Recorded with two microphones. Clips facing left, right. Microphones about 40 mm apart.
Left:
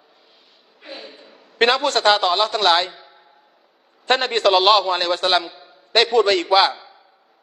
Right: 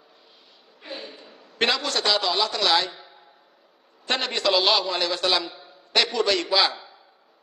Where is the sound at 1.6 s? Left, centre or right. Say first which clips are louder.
Left 7 dB; left.